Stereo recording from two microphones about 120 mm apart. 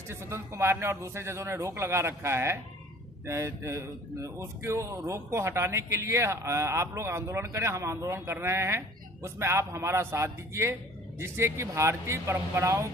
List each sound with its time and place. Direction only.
0.1 s speech: 20° right (ahead or behind)